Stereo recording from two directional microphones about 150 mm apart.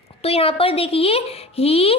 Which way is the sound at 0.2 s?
40° left (ahead or behind).